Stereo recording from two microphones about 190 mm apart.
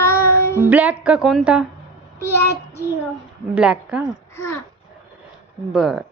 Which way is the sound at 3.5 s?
5° right (ahead or behind).